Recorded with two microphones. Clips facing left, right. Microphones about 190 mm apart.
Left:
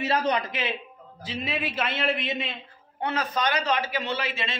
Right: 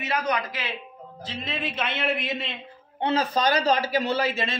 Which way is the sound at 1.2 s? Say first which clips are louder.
Left 1 dB; 10° left (ahead or behind).